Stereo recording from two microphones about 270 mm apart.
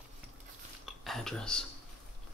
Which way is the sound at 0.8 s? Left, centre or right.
Centre.